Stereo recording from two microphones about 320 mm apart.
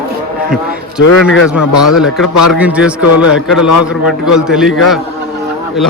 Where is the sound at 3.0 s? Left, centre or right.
Left.